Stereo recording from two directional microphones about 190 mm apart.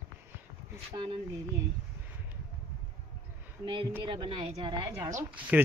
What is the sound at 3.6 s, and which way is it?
A woman's voice, 25° right (ahead or behind).